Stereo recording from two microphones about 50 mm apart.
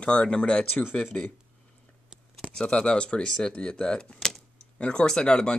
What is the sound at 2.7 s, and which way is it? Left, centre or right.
Speech, centre.